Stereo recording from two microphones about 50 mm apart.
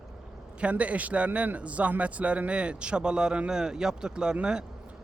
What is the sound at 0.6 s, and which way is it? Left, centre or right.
Speech, right.